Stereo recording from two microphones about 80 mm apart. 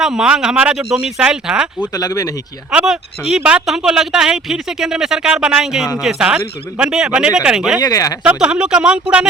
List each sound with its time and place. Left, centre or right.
0.0 s speech: centre
2.0 s speech: left
2.7 s speech: centre
7.8 s speech: left
8.2 s speech: centre